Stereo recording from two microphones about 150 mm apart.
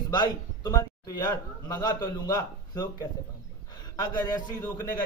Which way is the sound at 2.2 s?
25° left (ahead or behind).